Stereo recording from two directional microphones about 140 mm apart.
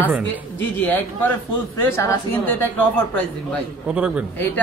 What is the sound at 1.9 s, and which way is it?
Speech, 20° left (ahead or behind).